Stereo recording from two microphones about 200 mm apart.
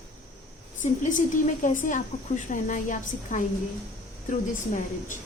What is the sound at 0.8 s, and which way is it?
A woman's voice, 40° left (ahead or behind).